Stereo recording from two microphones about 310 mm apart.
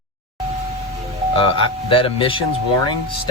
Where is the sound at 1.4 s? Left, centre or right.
Centre.